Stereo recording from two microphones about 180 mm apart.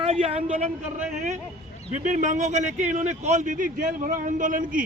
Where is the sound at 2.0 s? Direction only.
45° right (ahead or behind).